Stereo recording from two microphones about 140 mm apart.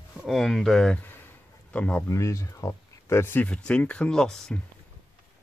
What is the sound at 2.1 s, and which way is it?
Speech, 20° left (ahead or behind).